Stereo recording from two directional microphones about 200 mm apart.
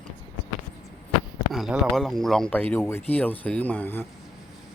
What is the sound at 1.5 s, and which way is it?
Speech, centre (ahead or behind).